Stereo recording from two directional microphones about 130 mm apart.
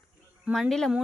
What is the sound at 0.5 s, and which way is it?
Speech, centre (ahead or behind).